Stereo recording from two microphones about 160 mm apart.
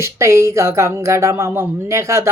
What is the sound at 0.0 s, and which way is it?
Speech, 15° right (ahead or behind).